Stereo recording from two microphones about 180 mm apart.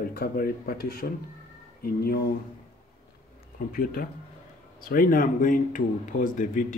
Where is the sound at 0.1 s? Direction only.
55° left (ahead or behind).